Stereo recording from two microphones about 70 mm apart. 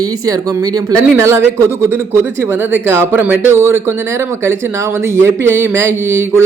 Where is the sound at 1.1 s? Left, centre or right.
Right.